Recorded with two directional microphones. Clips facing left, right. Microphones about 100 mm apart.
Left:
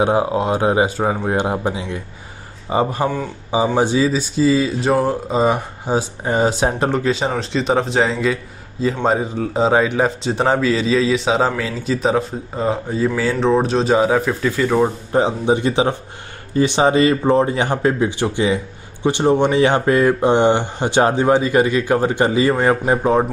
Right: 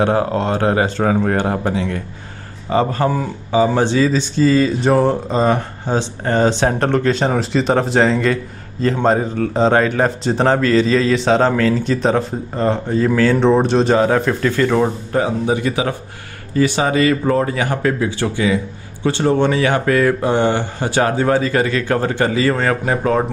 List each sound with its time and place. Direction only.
0.0 s speech: 15° left (ahead or behind)
15.1 s speech: 25° left (ahead or behind)